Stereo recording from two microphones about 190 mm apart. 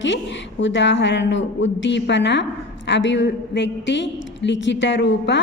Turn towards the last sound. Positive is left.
turn(degrees=70)  # may be behind; listen again after turning